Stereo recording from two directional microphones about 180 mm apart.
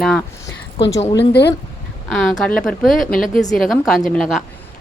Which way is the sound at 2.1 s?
Centre (ahead or behind).